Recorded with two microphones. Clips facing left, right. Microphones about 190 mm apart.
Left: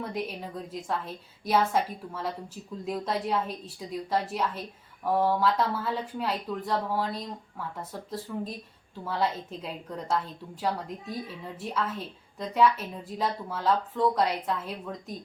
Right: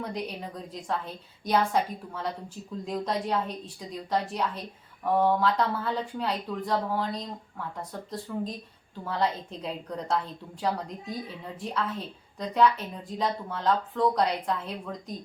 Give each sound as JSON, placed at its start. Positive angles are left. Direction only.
{"t": 0.0, "sound": "a woman's voice", "side_deg": 0}